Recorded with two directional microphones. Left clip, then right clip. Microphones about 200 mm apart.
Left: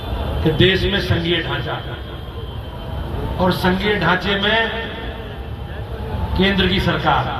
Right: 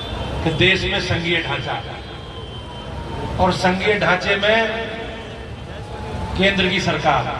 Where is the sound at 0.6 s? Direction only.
50° right (ahead or behind).